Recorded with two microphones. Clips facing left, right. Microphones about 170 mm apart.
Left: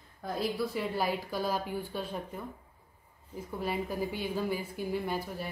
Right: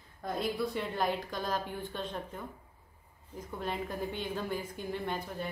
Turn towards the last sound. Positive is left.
turn(degrees=5)  # may be behind; listen again after turning